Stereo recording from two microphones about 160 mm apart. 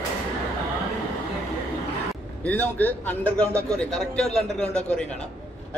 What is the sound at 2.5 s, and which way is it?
A man's voice, 10° left (ahead or behind).